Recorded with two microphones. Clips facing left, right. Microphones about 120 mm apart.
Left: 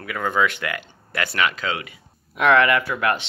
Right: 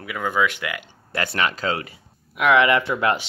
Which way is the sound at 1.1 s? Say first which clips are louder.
Even; 30° right (ahead or behind).